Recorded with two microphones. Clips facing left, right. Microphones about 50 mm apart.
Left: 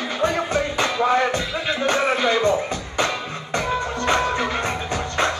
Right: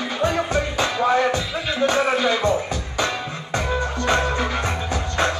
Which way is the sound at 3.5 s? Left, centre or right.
Left.